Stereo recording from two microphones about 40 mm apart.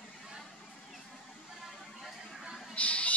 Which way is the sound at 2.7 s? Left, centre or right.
Left.